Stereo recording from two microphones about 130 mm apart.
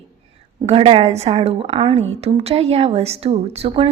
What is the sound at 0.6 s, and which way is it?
Speech, 45° right (ahead or behind).